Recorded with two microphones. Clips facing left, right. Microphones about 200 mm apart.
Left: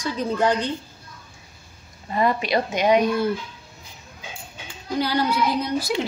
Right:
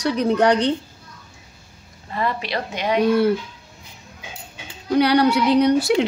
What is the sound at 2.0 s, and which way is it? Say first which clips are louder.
Speech: left 3 dB; 15° left (ahead or behind).